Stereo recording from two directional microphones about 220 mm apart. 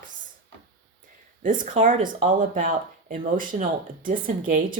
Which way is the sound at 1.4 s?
35° right (ahead or behind).